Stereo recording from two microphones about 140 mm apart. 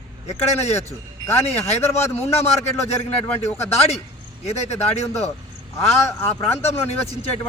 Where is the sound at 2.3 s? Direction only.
50° left (ahead or behind).